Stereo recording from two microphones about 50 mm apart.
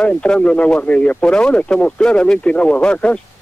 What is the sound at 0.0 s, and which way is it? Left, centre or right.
A man's voice, left.